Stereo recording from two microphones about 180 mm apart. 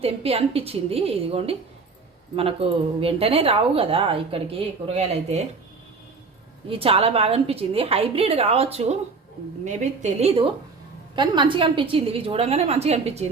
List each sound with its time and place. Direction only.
0.0 s speech: 35° right (ahead or behind)
6.7 s speech: 30° right (ahead or behind)